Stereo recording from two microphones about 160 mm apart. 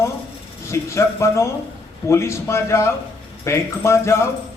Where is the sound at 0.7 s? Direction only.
20° left (ahead or behind).